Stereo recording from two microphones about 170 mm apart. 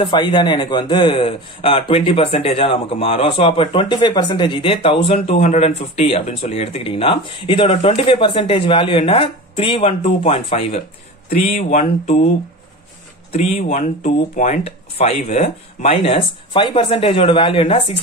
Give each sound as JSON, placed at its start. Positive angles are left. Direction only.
{"t": 0.0, "sound": "a man's voice", "side_deg": 30}
{"t": 13.3, "sound": "a man's voice", "side_deg": 40}